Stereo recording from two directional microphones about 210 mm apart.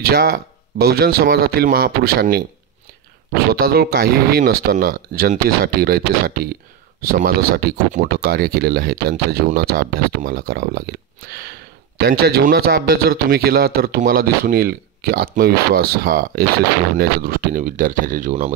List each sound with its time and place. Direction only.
0.0 s speech: 45° right (ahead or behind)
3.5 s speech: 45° right (ahead or behind)